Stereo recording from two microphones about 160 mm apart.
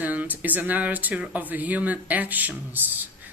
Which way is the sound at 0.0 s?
10° right (ahead or behind).